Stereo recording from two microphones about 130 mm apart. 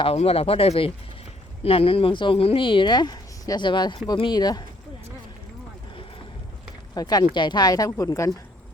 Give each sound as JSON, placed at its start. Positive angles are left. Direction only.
{"t": 0.0, "sound": "speech", "side_deg": 50}
{"t": 6.9, "sound": "speech", "side_deg": 30}